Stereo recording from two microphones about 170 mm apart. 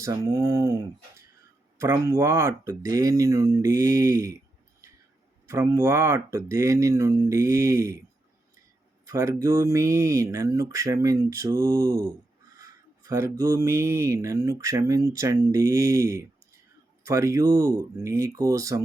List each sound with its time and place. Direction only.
0.0 s speech: 15° right (ahead or behind)
5.5 s speech: 15° right (ahead or behind)
9.0 s speech: 20° right (ahead or behind)